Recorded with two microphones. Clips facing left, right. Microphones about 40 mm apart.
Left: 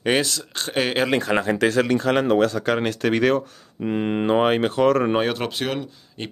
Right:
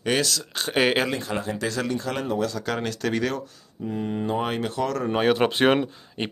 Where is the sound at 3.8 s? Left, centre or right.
Left.